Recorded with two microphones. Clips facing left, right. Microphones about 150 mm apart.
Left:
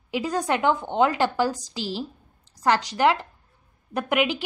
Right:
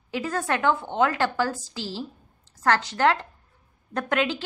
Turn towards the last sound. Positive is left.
turn(degrees=15)  # may be behind; listen again after turning